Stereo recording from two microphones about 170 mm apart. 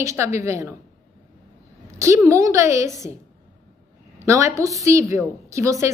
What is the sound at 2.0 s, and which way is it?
Speech, 20° right (ahead or behind).